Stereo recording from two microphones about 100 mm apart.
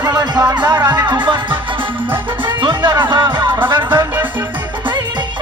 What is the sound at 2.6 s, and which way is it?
Music, 50° right (ahead or behind).